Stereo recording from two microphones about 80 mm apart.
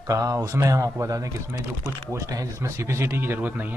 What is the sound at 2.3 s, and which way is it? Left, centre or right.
A man's voice, right.